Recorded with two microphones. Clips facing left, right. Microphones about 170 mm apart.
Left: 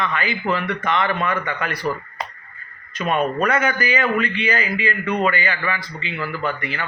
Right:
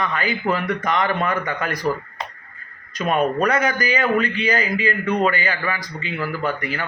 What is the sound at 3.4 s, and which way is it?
A man's voice, 35° right (ahead or behind).